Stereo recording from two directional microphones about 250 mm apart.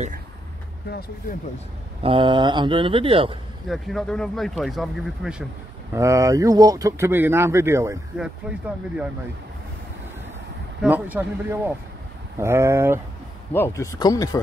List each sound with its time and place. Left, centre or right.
0.8 s speech: left
2.0 s speech: centre
3.6 s speech: centre
5.9 s speech: centre
10.8 s speech: centre
13.5 s speech: centre